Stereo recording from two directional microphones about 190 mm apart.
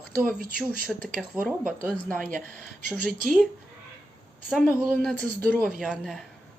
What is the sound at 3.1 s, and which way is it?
Speech, 45° right (ahead or behind).